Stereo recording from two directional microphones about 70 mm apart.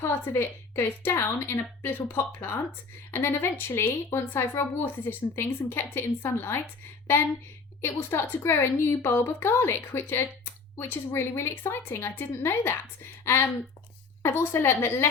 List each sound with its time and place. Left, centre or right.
0.0 s a woman's voice: left
7.8 s a woman's voice: left
14.2 s a woman's voice: left